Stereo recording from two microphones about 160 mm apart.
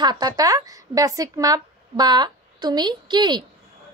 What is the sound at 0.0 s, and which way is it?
A woman's voice, 25° right (ahead or behind).